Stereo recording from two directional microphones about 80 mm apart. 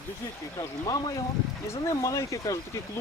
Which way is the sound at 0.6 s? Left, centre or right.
Left.